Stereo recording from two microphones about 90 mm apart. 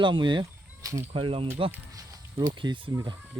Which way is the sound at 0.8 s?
40° right (ahead or behind).